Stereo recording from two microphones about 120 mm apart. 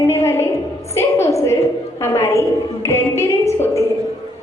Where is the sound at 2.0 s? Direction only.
20° left (ahead or behind).